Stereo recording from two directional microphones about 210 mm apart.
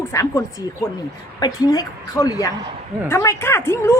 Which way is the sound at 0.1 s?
15° left (ahead or behind).